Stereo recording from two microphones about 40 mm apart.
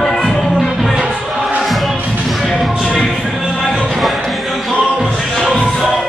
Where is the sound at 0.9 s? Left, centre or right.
Centre.